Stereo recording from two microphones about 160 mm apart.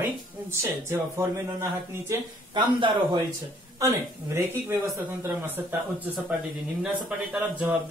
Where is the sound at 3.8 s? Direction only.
15° right (ahead or behind).